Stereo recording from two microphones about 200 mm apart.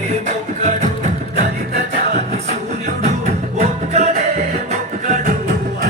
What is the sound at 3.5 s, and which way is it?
Music, 35° right (ahead or behind).